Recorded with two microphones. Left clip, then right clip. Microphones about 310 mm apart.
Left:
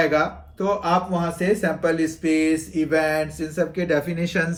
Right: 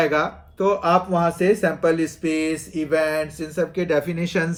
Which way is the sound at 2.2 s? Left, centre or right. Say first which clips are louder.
Left 3 dB; centre.